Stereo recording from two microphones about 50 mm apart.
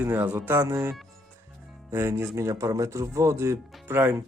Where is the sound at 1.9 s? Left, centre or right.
Right.